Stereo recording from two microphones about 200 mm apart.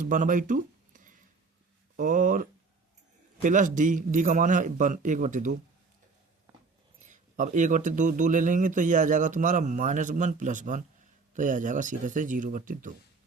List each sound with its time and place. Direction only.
0.0 s a sound: 40° right (ahead or behind)
2.0 s speech: 40° right (ahead or behind)
7.0 s speech: 40° right (ahead or behind)